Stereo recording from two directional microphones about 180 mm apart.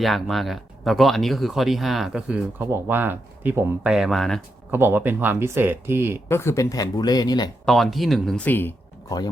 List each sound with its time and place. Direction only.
0.0 s speech: centre (ahead or behind)
4.7 s speech: 10° right (ahead or behind)
6.2 s speech: 15° left (ahead or behind)
7.6 s speech: centre (ahead or behind); by 9.3 s 20° left (ahead or behind)